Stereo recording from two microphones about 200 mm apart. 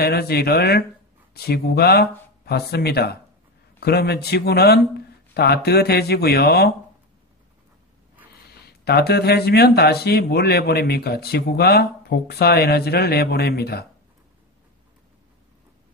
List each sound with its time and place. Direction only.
0.0 s speech: 50° left (ahead or behind)
8.5 s speech: 50° left (ahead or behind)